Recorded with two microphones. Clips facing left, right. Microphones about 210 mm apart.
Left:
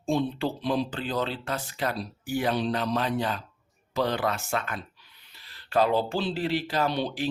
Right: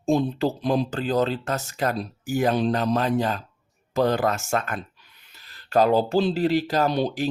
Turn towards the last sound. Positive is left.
turn(degrees=-40)  # may be behind; listen again after turning